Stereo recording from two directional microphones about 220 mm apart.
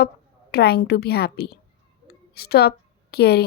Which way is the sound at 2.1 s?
45° left (ahead or behind).